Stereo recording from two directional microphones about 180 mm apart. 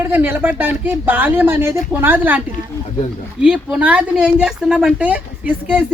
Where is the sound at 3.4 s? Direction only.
5° right (ahead or behind).